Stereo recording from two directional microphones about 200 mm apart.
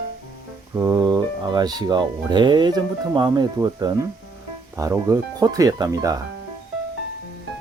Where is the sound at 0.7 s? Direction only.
15° right (ahead or behind).